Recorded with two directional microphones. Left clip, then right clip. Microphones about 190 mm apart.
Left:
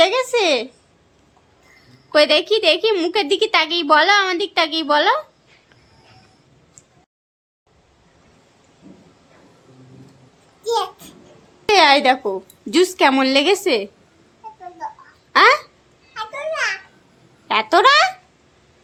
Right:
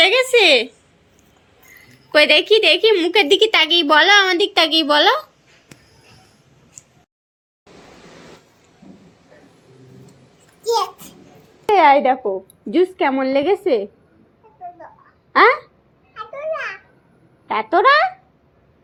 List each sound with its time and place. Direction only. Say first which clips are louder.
0.0 s a woman's voice: right 3 dB; 5° left (ahead or behind)
2.1 s a woman's voice: right 2 dB; centre (ahead or behind)
10.6 s a sound: right 2 dB; 10° left (ahead or behind)
11.7 s a woman's voice: even; 10° left (ahead or behind)
15.3 s speech: even; 5° left (ahead or behind)
16.1 s a sound: left 1 dB; 25° left (ahead or behind)
17.5 s a woman's voice: left 1 dB; 10° left (ahead or behind)